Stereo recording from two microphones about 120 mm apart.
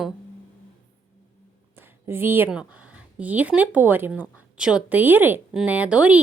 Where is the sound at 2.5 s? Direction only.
10° right (ahead or behind).